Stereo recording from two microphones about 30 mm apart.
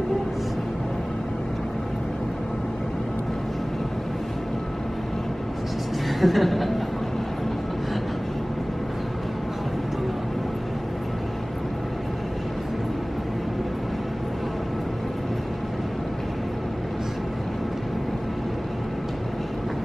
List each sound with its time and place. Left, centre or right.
6.0 s chuckle: centre